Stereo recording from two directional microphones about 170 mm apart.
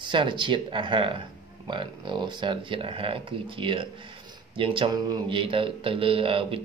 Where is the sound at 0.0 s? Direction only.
30° right (ahead or behind).